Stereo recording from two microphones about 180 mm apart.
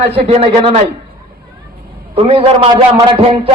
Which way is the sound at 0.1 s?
30° right (ahead or behind).